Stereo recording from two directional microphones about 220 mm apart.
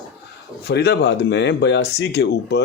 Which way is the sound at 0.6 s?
50° left (ahead or behind).